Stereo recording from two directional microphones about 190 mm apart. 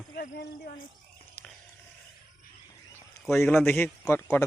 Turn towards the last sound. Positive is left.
turn(degrees=10)  # may be behind; listen again after turning